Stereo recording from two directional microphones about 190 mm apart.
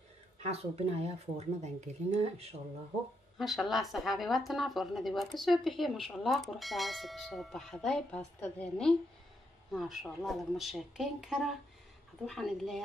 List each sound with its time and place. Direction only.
0.5 s speech: 35° right (ahead or behind)
3.3 s a woman's voice: centre (ahead or behind)